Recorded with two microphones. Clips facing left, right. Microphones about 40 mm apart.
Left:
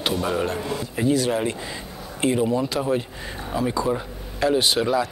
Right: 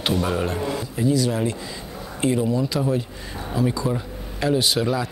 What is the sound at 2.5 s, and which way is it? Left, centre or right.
Speech, left.